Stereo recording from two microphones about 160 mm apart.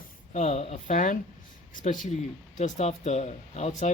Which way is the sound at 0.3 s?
45° left (ahead or behind).